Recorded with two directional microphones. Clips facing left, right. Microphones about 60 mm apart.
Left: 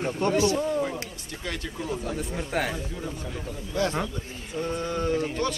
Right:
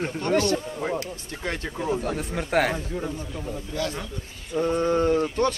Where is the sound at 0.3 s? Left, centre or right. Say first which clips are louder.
Right 2 dB; right.